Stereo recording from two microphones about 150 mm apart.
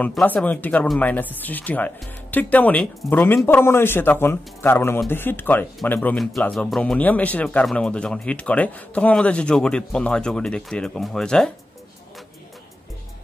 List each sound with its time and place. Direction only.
0.0 s a man's voice: 10° left (ahead or behind)
3.4 s a man's voice: 15° left (ahead or behind)
5.9 s speech: centre (ahead or behind)